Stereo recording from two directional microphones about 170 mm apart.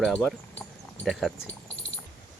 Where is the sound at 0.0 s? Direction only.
5° left (ahead or behind).